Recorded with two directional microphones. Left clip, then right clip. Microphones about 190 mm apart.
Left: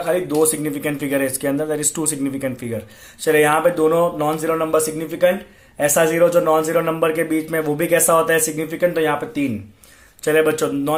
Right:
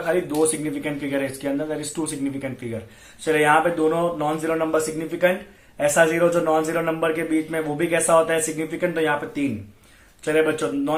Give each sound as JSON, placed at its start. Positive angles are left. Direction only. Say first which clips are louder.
{"t": 0.1, "sound": "a man's voice", "louder": "left 3 dB", "side_deg": 50}